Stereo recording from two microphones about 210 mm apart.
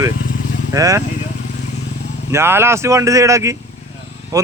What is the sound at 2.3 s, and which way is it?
Speech, 10° right (ahead or behind).